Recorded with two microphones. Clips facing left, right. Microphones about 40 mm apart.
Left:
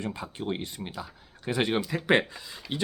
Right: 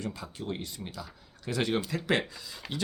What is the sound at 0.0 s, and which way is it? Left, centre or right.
Speech, left.